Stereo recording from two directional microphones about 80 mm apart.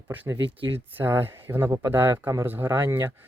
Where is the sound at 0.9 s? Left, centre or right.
Right.